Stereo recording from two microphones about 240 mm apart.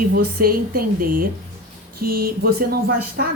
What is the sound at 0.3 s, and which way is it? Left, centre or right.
Speech, right.